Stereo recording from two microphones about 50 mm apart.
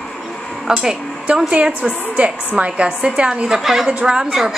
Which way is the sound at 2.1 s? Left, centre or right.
Right.